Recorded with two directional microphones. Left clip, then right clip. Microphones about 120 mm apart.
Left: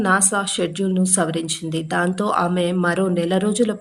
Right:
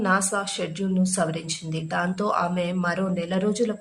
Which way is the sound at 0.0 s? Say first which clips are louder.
Left 5 dB; 30° left (ahead or behind).